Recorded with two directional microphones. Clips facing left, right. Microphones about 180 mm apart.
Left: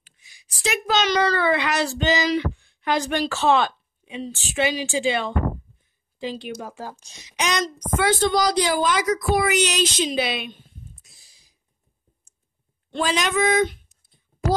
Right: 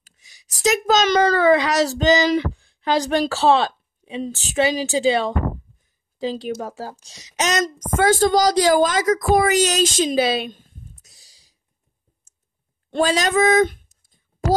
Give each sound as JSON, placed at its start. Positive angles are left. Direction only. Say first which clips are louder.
{"t": 0.0, "sound": "a woman's voice", "louder": "right 1 dB", "side_deg": -40}
{"t": 13.0, "sound": "speech", "louder": "right 4 dB", "side_deg": -35}